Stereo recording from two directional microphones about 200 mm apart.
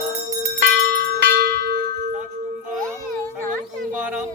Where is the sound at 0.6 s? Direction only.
55° right (ahead or behind).